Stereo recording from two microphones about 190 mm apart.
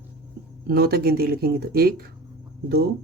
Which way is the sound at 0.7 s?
55° right (ahead or behind).